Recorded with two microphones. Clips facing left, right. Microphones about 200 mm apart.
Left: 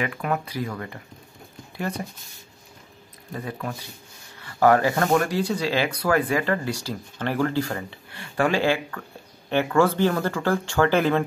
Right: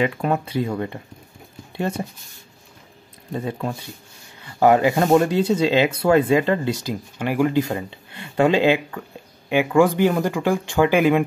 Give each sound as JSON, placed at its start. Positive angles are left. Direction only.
{"t": 0.0, "sound": "speech", "side_deg": -25}
{"t": 3.3, "sound": "speech", "side_deg": -25}